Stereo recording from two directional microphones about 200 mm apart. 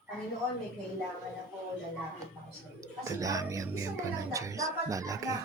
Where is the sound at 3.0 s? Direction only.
15° right (ahead or behind).